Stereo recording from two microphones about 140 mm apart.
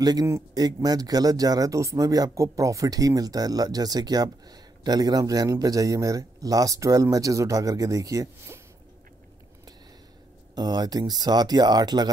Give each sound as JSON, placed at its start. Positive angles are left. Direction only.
{"t": 0.0, "sound": "speech", "side_deg": -25}
{"t": 10.5, "sound": "speech", "side_deg": -30}